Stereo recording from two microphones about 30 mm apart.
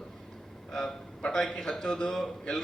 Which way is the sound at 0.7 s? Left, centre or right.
Centre.